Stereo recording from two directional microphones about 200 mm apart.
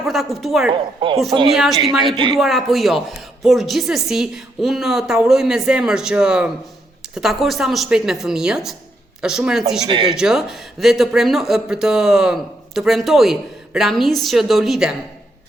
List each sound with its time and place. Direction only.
0.0 s a woman's voice: centre (ahead or behind)
0.7 s speech: 25° right (ahead or behind)
2.3 s a woman's voice: centre (ahead or behind)
9.8 s speech: 25° right (ahead or behind)
10.2 s a woman's voice: 5° right (ahead or behind)